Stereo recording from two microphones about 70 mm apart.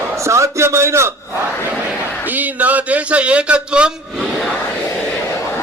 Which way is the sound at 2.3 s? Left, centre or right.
Right.